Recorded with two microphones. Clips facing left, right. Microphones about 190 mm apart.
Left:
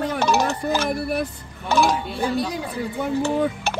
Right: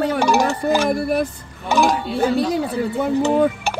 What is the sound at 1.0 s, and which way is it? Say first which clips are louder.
Speech: right 5 dB; 45° right (ahead or behind).